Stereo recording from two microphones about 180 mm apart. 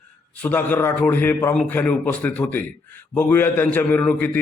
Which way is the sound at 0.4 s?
10° left (ahead or behind).